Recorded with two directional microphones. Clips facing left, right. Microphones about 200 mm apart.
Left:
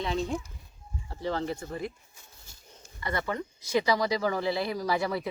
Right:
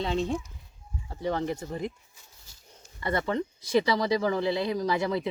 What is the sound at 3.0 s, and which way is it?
Speech, 30° right (ahead or behind).